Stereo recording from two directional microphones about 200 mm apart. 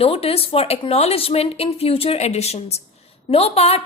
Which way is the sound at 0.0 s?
30° left (ahead or behind).